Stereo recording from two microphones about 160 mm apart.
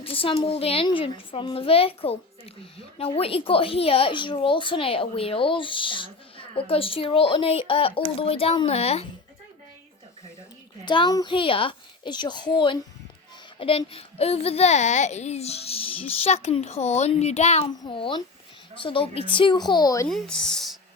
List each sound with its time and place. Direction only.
0.0 s a child's voice: 35° left (ahead or behind)
10.8 s a woman's voice: 30° left (ahead or behind)
20.1 s speech: 5° left (ahead or behind)